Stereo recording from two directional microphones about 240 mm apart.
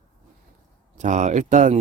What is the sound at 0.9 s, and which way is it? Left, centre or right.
Speech, right.